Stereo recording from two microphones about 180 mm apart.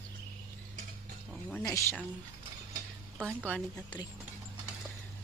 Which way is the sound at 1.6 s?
20° left (ahead or behind).